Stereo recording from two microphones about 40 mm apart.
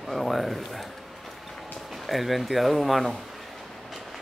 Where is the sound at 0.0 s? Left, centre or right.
Centre.